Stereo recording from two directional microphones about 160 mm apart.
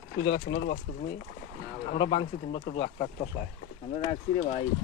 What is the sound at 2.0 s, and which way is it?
Speech, 30° left (ahead or behind).